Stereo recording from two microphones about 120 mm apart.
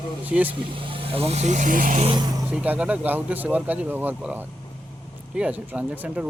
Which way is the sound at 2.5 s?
10° right (ahead or behind).